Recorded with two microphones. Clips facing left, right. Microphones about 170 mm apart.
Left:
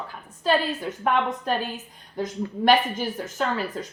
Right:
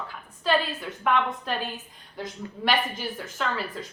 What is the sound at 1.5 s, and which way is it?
Speech, 45° left (ahead or behind).